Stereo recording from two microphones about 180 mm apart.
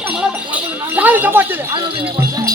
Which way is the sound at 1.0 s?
10° right (ahead or behind).